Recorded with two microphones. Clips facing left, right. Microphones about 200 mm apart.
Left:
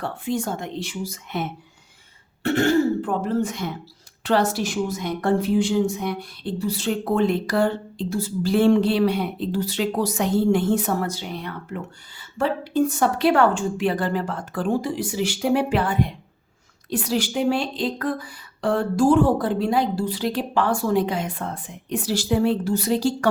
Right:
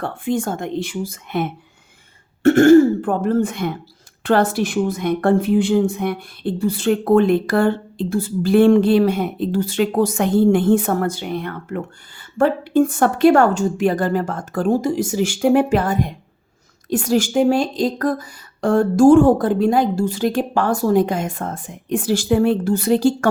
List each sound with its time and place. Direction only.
0.0 s a woman's voice: 50° right (ahead or behind)